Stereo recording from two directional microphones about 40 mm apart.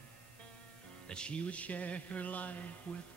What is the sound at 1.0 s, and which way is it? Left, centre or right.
Music, left.